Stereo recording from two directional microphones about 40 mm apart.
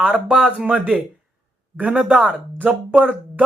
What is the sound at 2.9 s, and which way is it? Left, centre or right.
Speech, right.